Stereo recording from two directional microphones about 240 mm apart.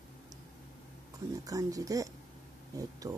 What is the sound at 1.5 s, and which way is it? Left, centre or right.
Speech, centre.